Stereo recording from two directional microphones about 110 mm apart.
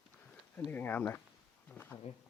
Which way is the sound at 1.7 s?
20° left (ahead or behind).